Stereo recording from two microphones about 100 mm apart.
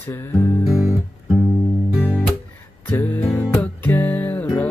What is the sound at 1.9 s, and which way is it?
Music, 10° right (ahead or behind).